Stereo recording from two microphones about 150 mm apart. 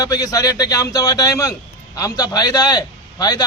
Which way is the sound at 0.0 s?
25° left (ahead or behind).